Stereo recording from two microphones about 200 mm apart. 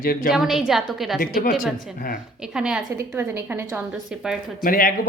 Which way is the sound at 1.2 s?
45° left (ahead or behind).